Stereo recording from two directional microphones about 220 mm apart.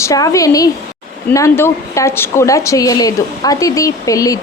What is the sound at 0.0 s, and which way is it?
Speech, 15° left (ahead or behind).